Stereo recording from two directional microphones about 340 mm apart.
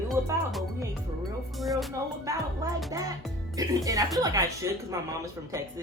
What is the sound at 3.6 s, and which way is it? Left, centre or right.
A woman's voice, centre.